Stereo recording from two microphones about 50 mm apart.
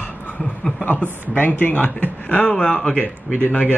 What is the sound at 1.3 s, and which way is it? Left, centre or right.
Speech, left.